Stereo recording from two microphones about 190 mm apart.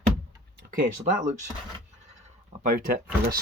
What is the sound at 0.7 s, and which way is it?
Speech, 45° right (ahead or behind).